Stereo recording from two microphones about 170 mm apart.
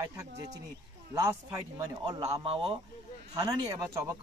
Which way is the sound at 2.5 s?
35° right (ahead or behind).